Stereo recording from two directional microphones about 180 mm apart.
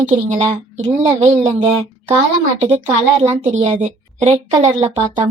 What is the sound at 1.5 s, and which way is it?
Speech, 35° right (ahead or behind).